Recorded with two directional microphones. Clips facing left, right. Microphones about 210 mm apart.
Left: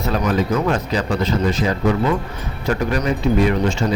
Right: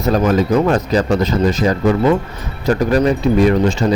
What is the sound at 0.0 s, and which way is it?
Speech, 40° right (ahead or behind).